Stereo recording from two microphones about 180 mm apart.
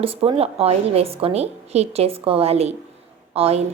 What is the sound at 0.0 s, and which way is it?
A woman's voice, 30° right (ahead or behind).